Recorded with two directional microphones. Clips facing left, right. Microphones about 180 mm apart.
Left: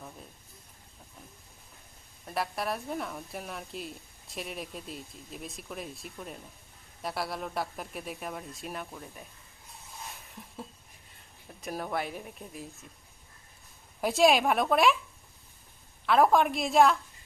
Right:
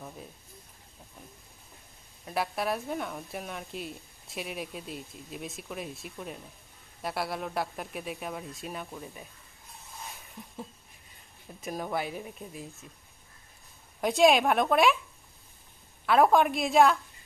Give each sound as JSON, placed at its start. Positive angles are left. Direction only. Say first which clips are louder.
{"t": 2.2, "sound": "a woman's voice", "louder": "right 2 dB", "side_deg": 0}
{"t": 10.0, "sound": "a sound", "louder": "right 1 dB", "side_deg": 0}
{"t": 11.6, "sound": "a woman's voice", "louder": "right 1 dB", "side_deg": 0}
{"t": 14.0, "sound": "a woman's voice", "louder": "right 1 dB", "side_deg": 0}
{"t": 16.0, "sound": "a woman's voice", "louder": "right 1 dB", "side_deg": 0}